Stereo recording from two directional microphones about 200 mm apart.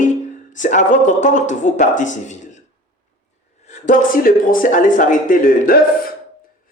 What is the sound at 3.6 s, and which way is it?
Speech, 35° left (ahead or behind).